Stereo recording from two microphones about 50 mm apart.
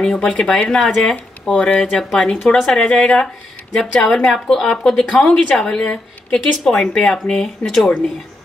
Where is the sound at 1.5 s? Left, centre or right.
Left.